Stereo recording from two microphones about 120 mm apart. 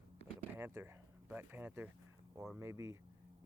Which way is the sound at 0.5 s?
20° right (ahead or behind).